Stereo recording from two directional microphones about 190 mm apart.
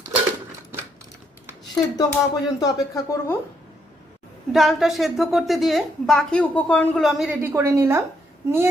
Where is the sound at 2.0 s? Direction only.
20° left (ahead or behind).